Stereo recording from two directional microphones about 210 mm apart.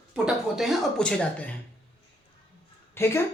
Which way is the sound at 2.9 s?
10° left (ahead or behind).